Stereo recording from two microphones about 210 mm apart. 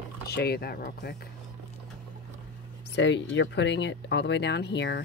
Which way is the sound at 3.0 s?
60° left (ahead or behind).